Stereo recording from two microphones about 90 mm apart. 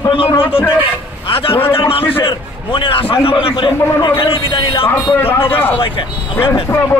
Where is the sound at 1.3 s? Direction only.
90° left.